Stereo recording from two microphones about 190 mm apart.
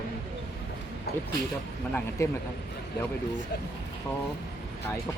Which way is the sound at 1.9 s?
15° left (ahead or behind).